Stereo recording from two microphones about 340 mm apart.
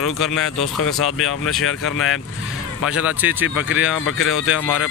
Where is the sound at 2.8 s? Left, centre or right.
Centre.